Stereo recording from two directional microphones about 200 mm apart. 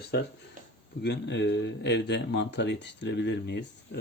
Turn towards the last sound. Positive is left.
turn(degrees=60)  # may be behind; listen again after turning